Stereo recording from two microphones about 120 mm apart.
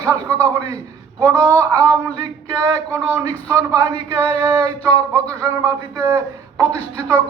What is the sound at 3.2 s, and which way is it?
Speech, 30° right (ahead or behind).